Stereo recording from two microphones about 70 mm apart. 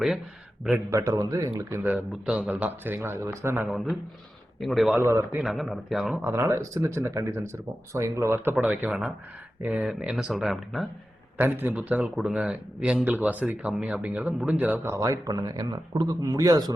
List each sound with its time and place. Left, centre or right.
0.9 s speech: right
1.8 s a man's voice: right
3.7 s speech: centre
4.9 s speech: right
5.4 s speech: centre
6.2 s speech: right
8.6 s a man's voice: centre
10.0 s speech: centre
11.3 s a man's voice: right
12.1 s a man's voice: centre
14.8 s speech: right
15.3 s speech: right
16.2 s speech: right